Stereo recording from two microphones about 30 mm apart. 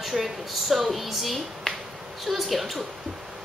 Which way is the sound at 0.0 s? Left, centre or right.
Centre.